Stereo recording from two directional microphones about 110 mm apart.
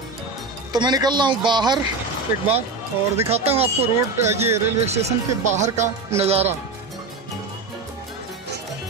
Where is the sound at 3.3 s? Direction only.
70° right (ahead or behind).